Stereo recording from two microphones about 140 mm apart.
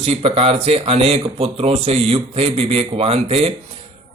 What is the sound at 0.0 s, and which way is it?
Speech, 45° right (ahead or behind).